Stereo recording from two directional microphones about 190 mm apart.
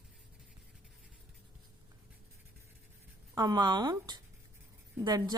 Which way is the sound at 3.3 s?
20° right (ahead or behind).